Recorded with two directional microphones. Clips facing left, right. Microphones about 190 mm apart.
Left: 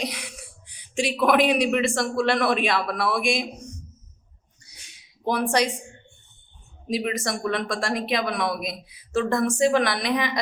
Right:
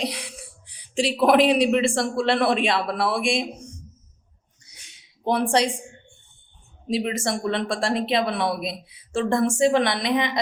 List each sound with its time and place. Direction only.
0.0 s speech: 30° right (ahead or behind)
5.2 s speech: 30° right (ahead or behind)
6.8 s speech: 25° right (ahead or behind)